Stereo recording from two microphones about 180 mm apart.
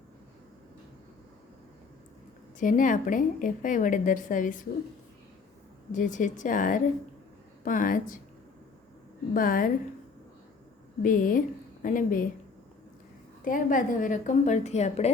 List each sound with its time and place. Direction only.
2.6 s a woman's voice: 45° left (ahead or behind)
5.9 s a woman's voice: 45° left (ahead or behind)
9.3 s a woman's voice: 50° left (ahead or behind)
11.0 s a woman's voice: 50° left (ahead or behind)
13.4 s a woman's voice: 45° left (ahead or behind)